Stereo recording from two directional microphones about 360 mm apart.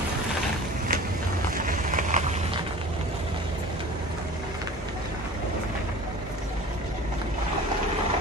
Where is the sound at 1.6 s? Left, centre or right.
Right.